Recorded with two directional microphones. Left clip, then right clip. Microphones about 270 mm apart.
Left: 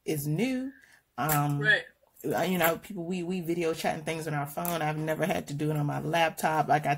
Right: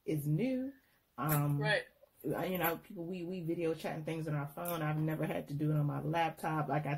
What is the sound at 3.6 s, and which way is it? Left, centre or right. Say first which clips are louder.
A woman's voice: left 8 dB; left.